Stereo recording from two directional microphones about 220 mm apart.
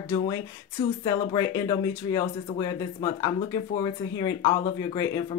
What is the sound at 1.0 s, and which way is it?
Speech, 15° left (ahead or behind).